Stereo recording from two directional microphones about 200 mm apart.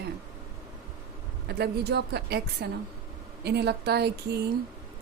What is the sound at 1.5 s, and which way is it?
Speech, 55° right (ahead or behind).